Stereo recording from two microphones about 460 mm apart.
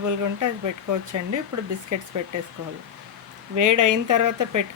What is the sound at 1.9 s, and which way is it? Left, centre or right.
Speech, right.